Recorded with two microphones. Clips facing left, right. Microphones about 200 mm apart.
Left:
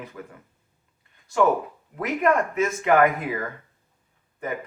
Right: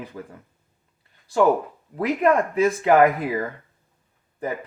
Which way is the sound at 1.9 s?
30° right (ahead or behind).